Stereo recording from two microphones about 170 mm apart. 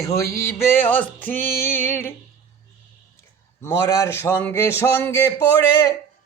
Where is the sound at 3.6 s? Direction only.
15° left (ahead or behind).